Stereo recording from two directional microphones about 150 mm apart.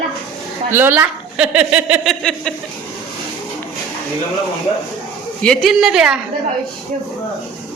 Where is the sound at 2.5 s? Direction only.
5° left (ahead or behind).